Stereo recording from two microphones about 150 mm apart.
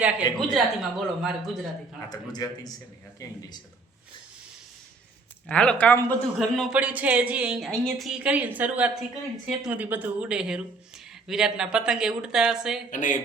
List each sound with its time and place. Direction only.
0.3 s speech: centre (ahead or behind)
2.0 s a man's voice: 25° left (ahead or behind)
5.5 s speech: 10° left (ahead or behind)
6.6 s a woman's voice: 5° right (ahead or behind)
12.9 s speech: 60° left (ahead or behind)